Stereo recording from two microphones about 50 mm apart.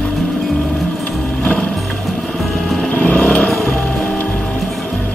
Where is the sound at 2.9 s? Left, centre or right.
Left.